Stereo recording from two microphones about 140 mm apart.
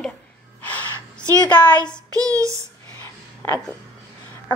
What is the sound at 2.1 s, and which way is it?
Child singing, 25° right (ahead or behind).